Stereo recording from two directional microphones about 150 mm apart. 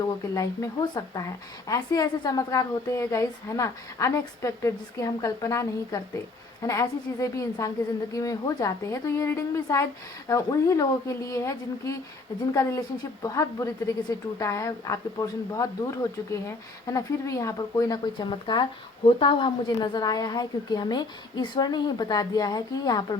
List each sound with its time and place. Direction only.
0.3 s speech: 25° left (ahead or behind)